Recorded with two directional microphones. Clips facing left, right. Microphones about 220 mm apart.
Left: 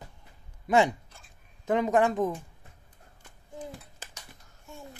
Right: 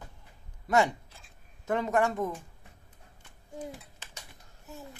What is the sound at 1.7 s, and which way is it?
Speech, 15° left (ahead or behind).